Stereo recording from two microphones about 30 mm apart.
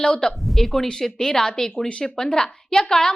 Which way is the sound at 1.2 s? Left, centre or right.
Left.